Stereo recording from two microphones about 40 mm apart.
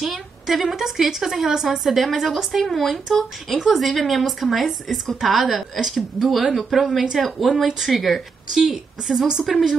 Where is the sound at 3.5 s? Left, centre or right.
Centre.